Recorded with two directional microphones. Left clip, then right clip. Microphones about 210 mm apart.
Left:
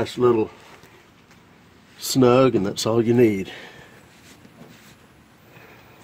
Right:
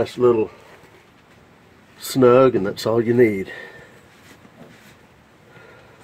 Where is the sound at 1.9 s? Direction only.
45° left (ahead or behind).